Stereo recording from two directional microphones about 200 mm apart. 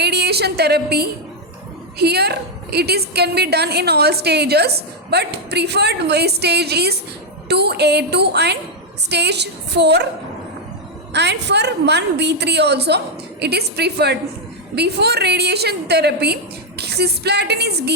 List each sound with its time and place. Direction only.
0.0 s a woman's voice: 55° right (ahead or behind)
11.1 s a woman's voice: 60° right (ahead or behind)